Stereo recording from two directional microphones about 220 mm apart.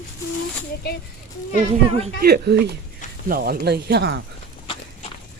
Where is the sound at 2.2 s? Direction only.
45° right (ahead or behind).